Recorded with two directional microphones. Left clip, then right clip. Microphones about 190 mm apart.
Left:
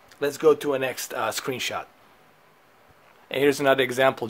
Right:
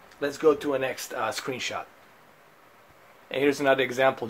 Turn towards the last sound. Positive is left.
turn(degrees=30)  # may be behind; listen again after turning